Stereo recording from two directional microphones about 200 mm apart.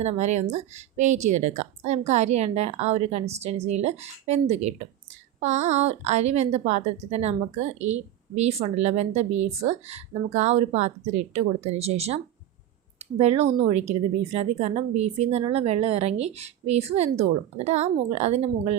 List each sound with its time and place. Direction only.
0.0 s a woman's voice: 35° right (ahead or behind)